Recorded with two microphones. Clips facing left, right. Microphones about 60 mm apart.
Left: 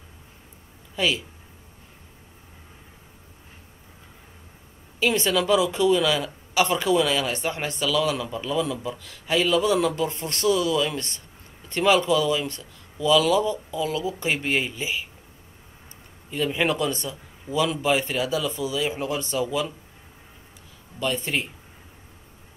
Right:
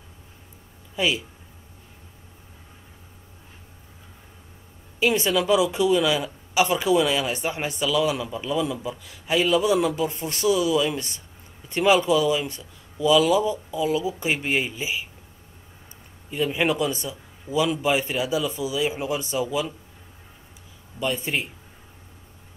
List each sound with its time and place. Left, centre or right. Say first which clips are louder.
0.9 s speech: even; centre
5.0 s speech: right 1 dB; centre
16.3 s a man's voice: right 1 dB; centre
21.0 s speech: even; centre